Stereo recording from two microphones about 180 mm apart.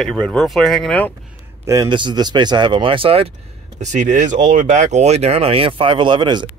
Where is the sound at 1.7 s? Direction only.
20° right (ahead or behind).